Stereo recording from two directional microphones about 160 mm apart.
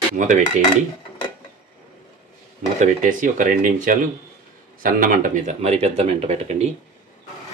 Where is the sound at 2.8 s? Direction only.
50° right (ahead or behind).